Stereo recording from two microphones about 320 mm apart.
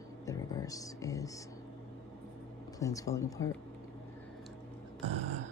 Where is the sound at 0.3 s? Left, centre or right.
Centre.